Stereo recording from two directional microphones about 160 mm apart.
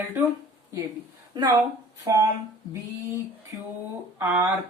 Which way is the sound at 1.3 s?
25° right (ahead or behind).